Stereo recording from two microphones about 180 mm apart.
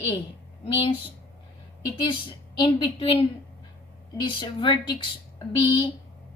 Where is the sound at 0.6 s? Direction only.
30° left (ahead or behind).